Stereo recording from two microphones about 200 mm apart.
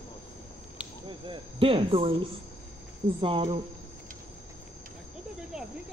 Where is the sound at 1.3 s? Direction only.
25° right (ahead or behind).